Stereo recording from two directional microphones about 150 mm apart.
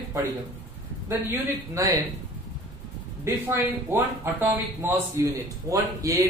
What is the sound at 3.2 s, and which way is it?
Speech, 15° right (ahead or behind).